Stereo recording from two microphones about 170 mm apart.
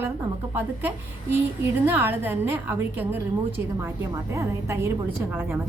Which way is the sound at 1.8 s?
10° right (ahead or behind).